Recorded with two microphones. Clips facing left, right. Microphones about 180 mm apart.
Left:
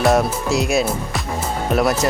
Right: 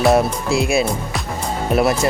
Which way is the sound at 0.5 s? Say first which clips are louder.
Right 1 dB; 45° left (ahead or behind).